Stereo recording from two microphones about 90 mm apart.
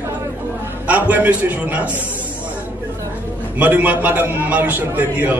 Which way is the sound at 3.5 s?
20° right (ahead or behind).